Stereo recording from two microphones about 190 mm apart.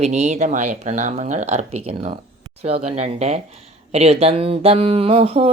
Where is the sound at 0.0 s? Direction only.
35° right (ahead or behind).